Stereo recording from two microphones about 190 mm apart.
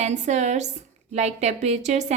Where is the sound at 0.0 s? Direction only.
35° right (ahead or behind).